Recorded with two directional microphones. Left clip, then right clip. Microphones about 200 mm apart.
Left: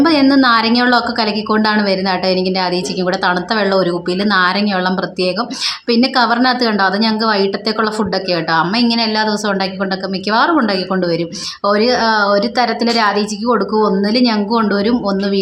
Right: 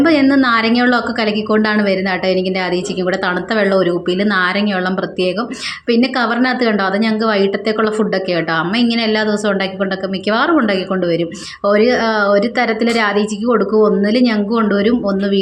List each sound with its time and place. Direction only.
0.0 s a woman's voice: 5° right (ahead or behind)
5.9 s a woman's voice: 5° right (ahead or behind)